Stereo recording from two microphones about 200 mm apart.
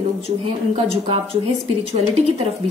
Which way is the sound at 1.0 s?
25° right (ahead or behind).